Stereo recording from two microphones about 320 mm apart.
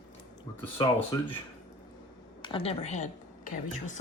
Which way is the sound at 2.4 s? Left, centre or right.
Centre.